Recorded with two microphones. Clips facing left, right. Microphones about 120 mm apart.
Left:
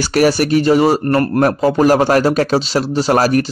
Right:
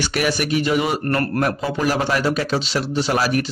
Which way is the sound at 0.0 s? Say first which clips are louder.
Left 8 dB; 40° left (ahead or behind).